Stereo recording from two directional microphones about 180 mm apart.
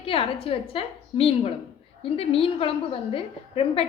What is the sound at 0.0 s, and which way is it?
A woman's voice, 30° left (ahead or behind).